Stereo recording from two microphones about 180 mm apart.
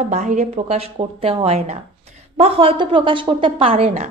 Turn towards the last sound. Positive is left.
turn(degrees=-35)  # may be behind; listen again after turning